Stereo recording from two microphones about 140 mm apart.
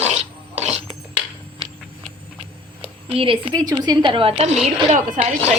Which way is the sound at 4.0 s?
40° right (ahead or behind).